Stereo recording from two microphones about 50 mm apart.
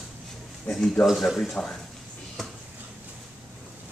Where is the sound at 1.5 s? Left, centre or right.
Centre.